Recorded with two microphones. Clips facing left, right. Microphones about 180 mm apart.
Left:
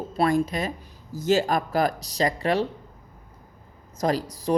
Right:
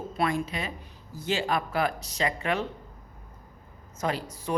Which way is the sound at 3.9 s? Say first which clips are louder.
Left 6 dB; 35° left (ahead or behind).